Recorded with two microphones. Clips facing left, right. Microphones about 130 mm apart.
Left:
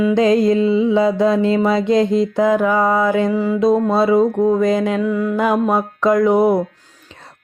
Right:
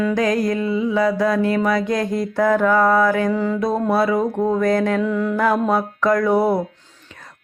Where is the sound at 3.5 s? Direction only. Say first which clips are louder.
Left 7 dB; 20° left (ahead or behind).